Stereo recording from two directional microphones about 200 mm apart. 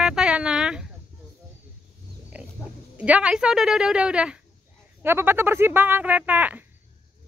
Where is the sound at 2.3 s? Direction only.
5° right (ahead or behind).